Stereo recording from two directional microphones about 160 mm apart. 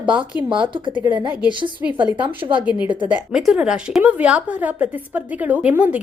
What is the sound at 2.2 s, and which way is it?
Speech, 30° right (ahead or behind).